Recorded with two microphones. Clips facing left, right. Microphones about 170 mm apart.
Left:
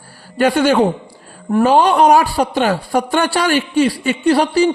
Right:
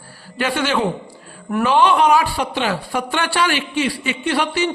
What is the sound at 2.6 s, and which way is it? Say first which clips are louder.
A woman's voice: left 5 dB; 45° left (ahead or behind).